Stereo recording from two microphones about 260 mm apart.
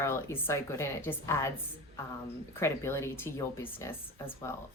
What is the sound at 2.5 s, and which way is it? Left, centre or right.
Speech, centre.